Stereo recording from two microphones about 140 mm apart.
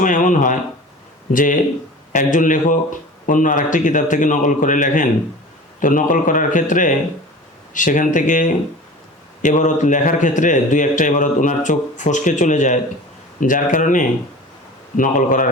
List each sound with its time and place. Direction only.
0.0 s a man's voice: 65° left (ahead or behind)